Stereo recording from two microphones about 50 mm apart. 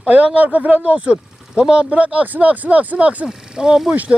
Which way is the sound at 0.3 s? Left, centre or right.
Right.